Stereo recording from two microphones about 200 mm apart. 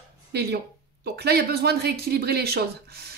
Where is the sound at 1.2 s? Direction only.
50° right (ahead or behind).